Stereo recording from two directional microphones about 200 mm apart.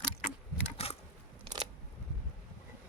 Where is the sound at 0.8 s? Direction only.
30° left (ahead or behind).